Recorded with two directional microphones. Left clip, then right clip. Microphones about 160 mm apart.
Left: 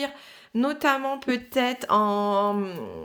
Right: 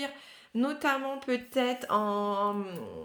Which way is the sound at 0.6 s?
40° left (ahead or behind).